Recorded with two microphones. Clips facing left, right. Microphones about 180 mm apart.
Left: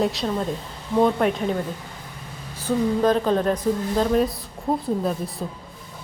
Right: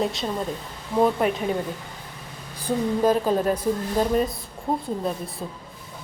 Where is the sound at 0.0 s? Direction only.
Centre (ahead or behind).